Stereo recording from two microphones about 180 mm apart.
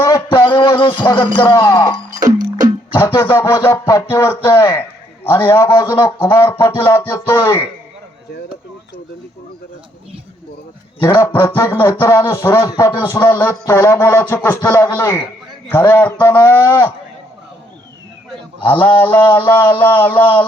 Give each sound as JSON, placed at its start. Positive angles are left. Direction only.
{"t": 0.0, "sound": "a sound", "side_deg": 20}
{"t": 1.5, "sound": "music", "side_deg": 20}
{"t": 2.2, "sound": "music", "side_deg": -20}
{"t": 2.9, "sound": "music", "side_deg": 15}
{"t": 4.4, "sound": "a man's voice", "side_deg": 15}
{"t": 6.2, "sound": "music", "side_deg": 15}
{"t": 11.0, "sound": "music", "side_deg": 10}
{"t": 18.8, "sound": "music", "side_deg": 25}
{"t": 19.5, "sound": "music", "side_deg": 10}